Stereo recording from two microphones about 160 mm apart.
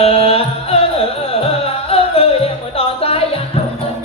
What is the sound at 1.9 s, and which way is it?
Music, 35° left (ahead or behind).